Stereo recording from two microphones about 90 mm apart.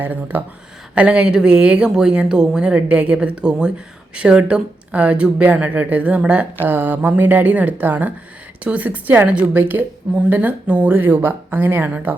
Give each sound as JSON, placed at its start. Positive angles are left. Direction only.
{"t": 0.0, "sound": "speech", "side_deg": -20}